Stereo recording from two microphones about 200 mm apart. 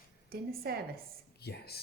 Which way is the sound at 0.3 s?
50° right (ahead or behind).